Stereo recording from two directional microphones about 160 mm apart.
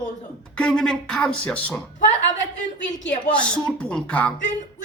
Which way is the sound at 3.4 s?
5° left (ahead or behind).